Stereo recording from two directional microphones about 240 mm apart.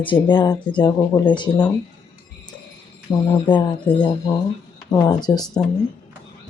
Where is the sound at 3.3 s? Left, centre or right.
Centre.